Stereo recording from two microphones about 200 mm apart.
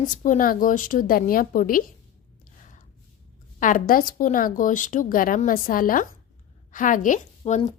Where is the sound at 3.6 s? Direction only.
40° left (ahead or behind).